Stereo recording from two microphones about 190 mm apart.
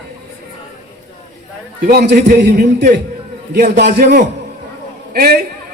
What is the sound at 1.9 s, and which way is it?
A man's voice, 55° right (ahead or behind).